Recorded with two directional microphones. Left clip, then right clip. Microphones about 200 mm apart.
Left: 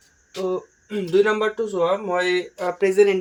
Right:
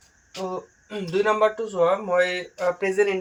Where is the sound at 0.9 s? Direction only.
40° left (ahead or behind).